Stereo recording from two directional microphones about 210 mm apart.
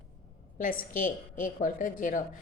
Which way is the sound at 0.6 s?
40° left (ahead or behind).